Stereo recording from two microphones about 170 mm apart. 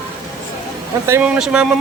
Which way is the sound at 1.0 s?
15° right (ahead or behind).